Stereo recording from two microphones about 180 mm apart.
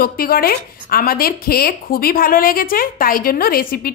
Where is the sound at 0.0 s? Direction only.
55° left (ahead or behind).